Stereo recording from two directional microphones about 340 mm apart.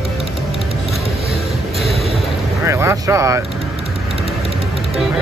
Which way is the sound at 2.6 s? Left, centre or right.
Centre.